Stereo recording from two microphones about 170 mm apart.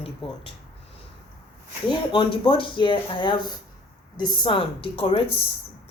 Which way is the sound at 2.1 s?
30° left (ahead or behind).